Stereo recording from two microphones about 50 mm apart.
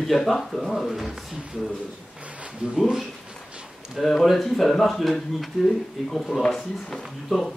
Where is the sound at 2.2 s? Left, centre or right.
Right.